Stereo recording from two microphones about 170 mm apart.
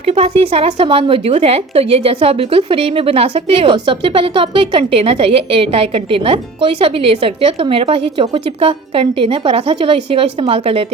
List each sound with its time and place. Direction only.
0.0 s speech: 35° right (ahead or behind)